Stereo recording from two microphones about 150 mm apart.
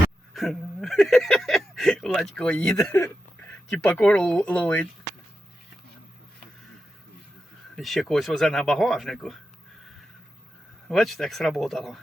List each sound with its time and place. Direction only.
0.3 s speech: centre (ahead or behind)
7.8 s speech: centre (ahead or behind)
10.8 s speech: centre (ahead or behind)